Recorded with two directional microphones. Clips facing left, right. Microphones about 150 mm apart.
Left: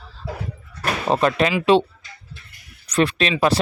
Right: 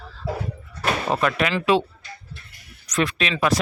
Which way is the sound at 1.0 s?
30° left (ahead or behind).